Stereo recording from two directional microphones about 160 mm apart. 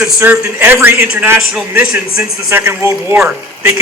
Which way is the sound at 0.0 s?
10° right (ahead or behind).